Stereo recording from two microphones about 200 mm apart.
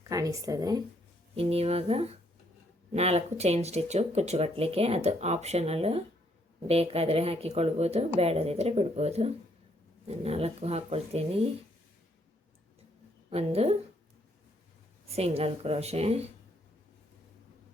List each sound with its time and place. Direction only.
0.0 s speech: 15° right (ahead or behind)
1.4 s speech: 30° right (ahead or behind)
13.3 s speech: 30° right (ahead or behind)
15.1 s speech: 30° right (ahead or behind)